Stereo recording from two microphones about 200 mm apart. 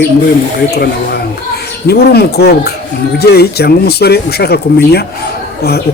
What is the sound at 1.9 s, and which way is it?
Speech, 55° left (ahead or behind).